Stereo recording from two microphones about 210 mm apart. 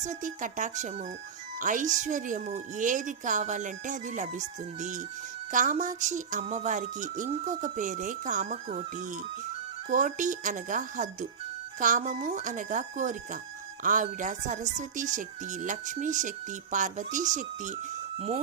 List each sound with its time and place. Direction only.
0.0 s a woman's voice: 35° right (ahead or behind)
9.9 s a woman's voice: 35° right (ahead or behind)